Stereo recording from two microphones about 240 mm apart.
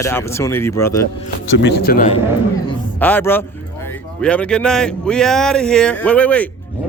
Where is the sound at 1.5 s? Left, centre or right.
Left.